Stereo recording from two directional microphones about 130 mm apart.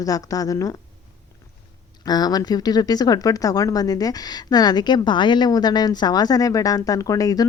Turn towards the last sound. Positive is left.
turn(degrees=30)  # may be behind; listen again after turning